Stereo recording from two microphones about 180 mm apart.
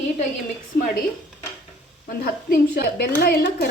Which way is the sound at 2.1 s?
60° left (ahead or behind).